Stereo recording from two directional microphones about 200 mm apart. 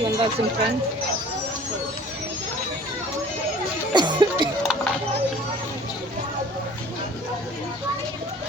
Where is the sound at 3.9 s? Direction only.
25° right (ahead or behind).